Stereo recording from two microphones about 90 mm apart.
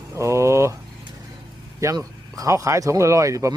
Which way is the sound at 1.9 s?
40° right (ahead or behind).